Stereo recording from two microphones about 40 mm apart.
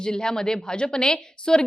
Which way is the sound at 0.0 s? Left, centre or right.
Centre.